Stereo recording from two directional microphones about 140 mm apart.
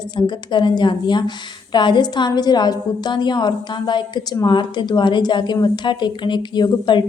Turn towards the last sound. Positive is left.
turn(degrees=30)  # may be behind; listen again after turning